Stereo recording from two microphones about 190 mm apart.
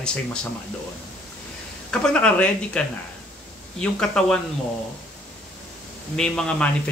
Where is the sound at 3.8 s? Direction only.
5° left (ahead or behind).